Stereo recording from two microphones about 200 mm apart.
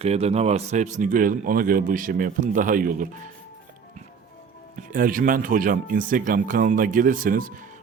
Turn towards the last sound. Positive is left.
turn(degrees=-45)  # may be behind; listen again after turning